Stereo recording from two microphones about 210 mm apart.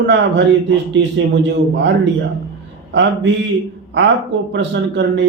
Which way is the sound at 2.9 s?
60° right (ahead or behind).